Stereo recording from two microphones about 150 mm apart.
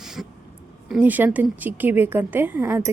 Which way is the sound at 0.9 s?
10° right (ahead or behind).